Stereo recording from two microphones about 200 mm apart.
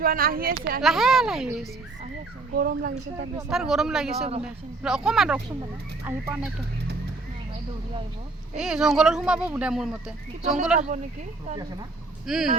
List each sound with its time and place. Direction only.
0.0 s speech: 45° right (ahead or behind)
0.8 s speech: centre (ahead or behind)
2.6 s speech: 45° right (ahead or behind)
3.5 s speech: centre (ahead or behind)
8.5 s speech: centre (ahead or behind)
10.8 s speech: 35° right (ahead or behind)
12.2 s speech: centre (ahead or behind)